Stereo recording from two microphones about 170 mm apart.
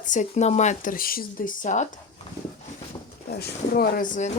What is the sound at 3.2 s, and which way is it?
Speech, 70° left (ahead or behind).